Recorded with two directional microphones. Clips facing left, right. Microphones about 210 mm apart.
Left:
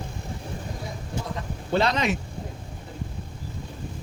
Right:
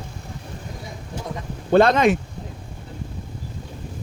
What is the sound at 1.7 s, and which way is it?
Speech, 50° right (ahead or behind).